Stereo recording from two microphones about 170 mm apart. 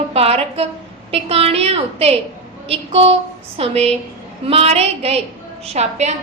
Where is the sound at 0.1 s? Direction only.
35° right (ahead or behind).